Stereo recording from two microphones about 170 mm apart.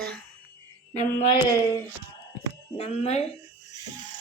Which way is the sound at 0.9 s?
40° left (ahead or behind).